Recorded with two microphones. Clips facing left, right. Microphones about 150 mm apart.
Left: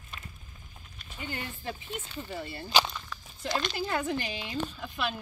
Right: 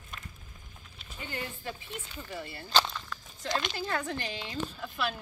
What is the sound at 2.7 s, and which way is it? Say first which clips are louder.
Walk: left 1 dB; 10° left (ahead or behind).